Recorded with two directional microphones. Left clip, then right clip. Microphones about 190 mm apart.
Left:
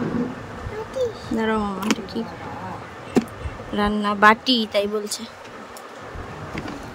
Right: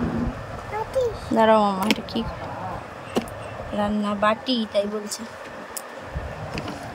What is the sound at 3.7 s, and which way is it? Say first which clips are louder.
A woman's voice: left 3 dB; 15° left (ahead or behind).